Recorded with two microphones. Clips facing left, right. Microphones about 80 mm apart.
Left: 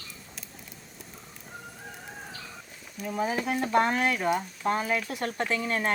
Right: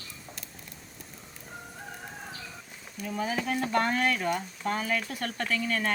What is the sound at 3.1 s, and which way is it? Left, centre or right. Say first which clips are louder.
Speech: left 2 dB; centre.